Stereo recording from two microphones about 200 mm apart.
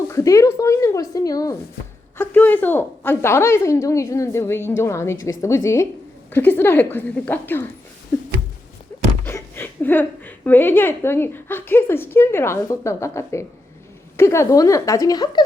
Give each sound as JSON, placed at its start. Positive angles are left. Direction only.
{"t": 0.1, "sound": "a woman's voice", "side_deg": 15}
{"t": 8.9, "sound": "a sound", "side_deg": 10}
{"t": 9.2, "sound": "a woman's voice", "side_deg": 10}